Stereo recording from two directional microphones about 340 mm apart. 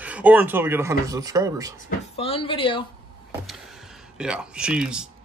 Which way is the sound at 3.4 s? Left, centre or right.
Centre.